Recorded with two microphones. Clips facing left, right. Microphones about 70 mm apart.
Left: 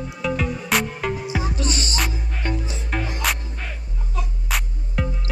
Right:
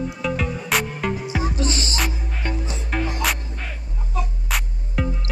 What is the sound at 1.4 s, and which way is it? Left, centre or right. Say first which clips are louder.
Music: right 2 dB; right.